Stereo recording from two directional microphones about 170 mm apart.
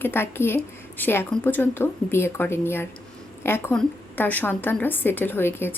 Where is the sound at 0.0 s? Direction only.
15° left (ahead or behind).